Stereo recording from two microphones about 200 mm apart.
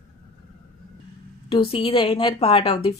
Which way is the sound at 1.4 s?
30° left (ahead or behind).